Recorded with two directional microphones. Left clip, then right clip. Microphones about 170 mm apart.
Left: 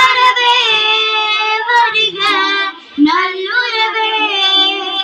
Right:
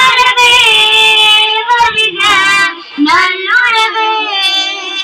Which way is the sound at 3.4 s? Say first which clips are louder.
Right 5 dB; 25° right (ahead or behind).